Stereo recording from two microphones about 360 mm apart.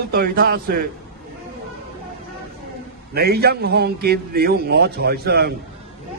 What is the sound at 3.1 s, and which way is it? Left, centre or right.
A man's voice, right.